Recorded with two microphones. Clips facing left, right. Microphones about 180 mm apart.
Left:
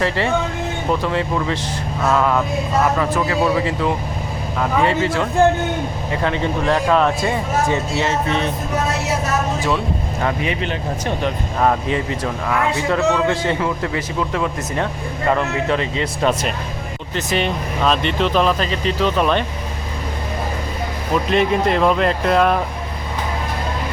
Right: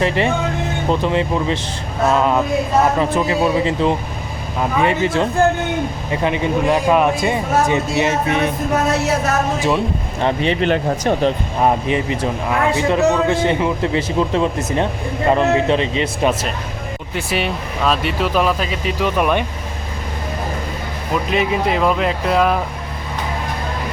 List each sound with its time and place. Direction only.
0.0 s a man's voice: 20° right (ahead or behind)
10.2 s speech: 30° right (ahead or behind)
11.6 s a man's voice: 15° right (ahead or behind)
17.2 s speech: 10° right (ahead or behind)
21.2 s speech: 5° right (ahead or behind)